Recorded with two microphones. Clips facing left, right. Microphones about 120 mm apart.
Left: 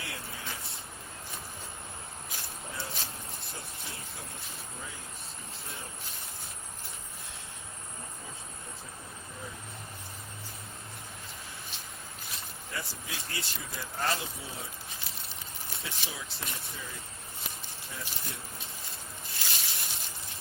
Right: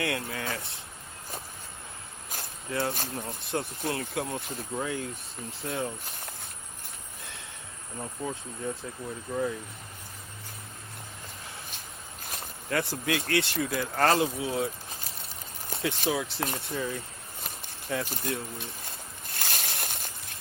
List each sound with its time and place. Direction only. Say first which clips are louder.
0.0 s speech: right 10 dB; 65° right (ahead or behind)
2.3 s speech: right 10 dB; 60° right (ahead or behind)
8.2 s speech: right 13 dB; 65° right (ahead or behind)
8.7 s speech: right 15 dB; 75° right (ahead or behind)
12.3 s speech: right 10 dB; 60° right (ahead or behind)
15.8 s speech: right 14 dB; 65° right (ahead or behind)
17.4 s speech: right 4 dB; 55° right (ahead or behind)
19.3 s a sound: right 6 dB; 55° right (ahead or behind)